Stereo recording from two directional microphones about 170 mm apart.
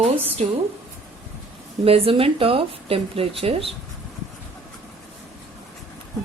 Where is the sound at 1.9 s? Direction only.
35° right (ahead or behind).